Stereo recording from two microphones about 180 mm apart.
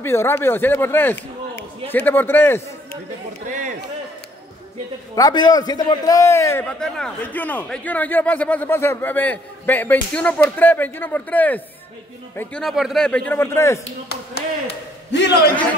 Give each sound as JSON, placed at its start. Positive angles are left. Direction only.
{"t": 0.0, "sound": "a man's voice", "side_deg": 15}
{"t": 3.4, "sound": "speech", "side_deg": -45}
{"t": 5.1, "sound": "a man's voice", "side_deg": 20}
{"t": 15.1, "sound": "a man's voice", "side_deg": 70}